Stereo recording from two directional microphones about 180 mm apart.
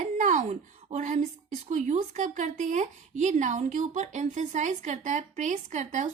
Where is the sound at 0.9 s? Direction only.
40° right (ahead or behind).